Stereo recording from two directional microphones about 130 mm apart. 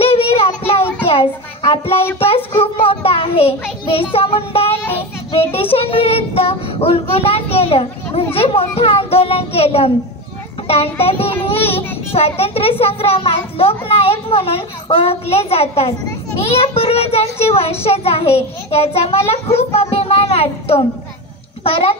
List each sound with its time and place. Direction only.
0.0 s child singing: 50° left (ahead or behind)
1.0 s a child's voice: 45° left (ahead or behind)